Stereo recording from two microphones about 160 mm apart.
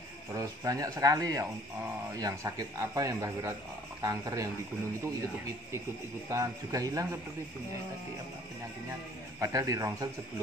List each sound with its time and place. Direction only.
0.3 s a man's voice: 20° right (ahead or behind)
6.2 s a man's voice: 20° right (ahead or behind)
9.4 s a man's voice: 20° right (ahead or behind)